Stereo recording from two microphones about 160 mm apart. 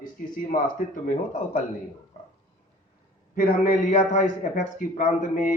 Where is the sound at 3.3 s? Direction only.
55° left (ahead or behind).